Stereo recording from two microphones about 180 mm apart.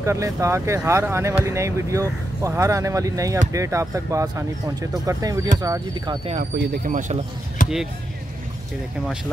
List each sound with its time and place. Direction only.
0.0 s speech: 15° right (ahead or behind)
6.5 s speech: 70° right (ahead or behind)
6.8 s speech: 45° right (ahead or behind)
7.6 s basketball bounce: 45° left (ahead or behind)